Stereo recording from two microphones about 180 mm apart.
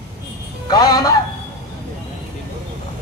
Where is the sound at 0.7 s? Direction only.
20° left (ahead or behind).